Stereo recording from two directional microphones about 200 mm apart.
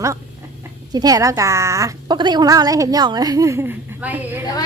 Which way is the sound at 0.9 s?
15° right (ahead or behind).